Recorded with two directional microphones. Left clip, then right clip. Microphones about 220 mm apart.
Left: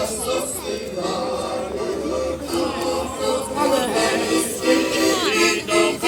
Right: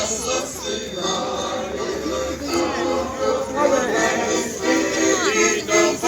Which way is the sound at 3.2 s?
45° left (ahead or behind).